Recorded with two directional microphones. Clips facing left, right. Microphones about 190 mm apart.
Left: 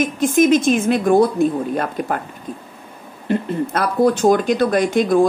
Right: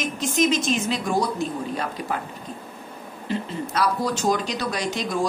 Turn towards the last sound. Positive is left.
turn(degrees=55)  # may be behind; listen again after turning